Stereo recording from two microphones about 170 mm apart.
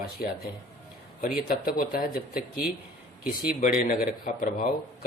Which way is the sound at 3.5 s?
55° left (ahead or behind).